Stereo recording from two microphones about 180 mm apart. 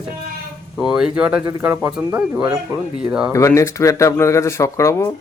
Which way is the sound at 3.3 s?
15° left (ahead or behind).